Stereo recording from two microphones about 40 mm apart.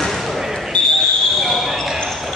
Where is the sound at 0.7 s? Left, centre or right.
Left.